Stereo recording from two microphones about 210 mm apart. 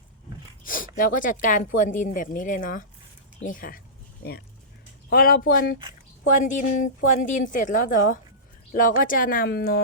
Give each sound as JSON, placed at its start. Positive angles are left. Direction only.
{"t": 0.6, "sound": "speech", "side_deg": 40}